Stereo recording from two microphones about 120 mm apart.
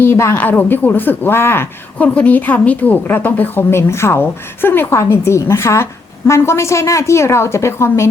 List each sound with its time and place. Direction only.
0.0 s a woman's voice: 20° left (ahead or behind)